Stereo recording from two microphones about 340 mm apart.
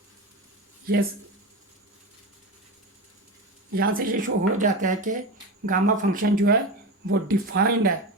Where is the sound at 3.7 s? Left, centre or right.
Right.